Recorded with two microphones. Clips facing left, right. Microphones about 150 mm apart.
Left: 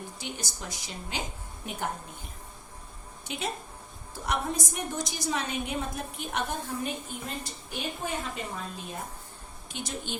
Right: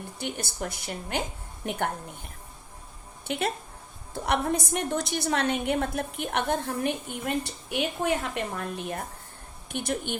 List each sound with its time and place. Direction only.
0.2 s a woman's voice: 60° right (ahead or behind)